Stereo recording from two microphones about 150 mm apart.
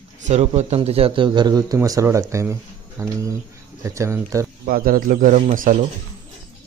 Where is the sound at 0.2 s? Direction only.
45° right (ahead or behind); by 2.5 s 20° right (ahead or behind).